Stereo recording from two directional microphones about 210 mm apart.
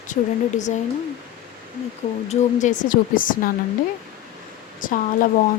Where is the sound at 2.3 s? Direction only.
35° left (ahead or behind).